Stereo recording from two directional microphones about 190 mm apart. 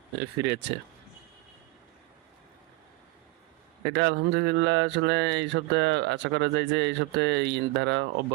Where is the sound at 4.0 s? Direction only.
70° right (ahead or behind).